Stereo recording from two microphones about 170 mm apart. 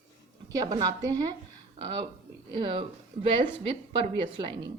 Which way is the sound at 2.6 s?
30° right (ahead or behind).